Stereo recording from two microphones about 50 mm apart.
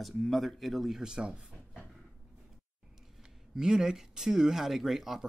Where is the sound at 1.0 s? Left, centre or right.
Centre.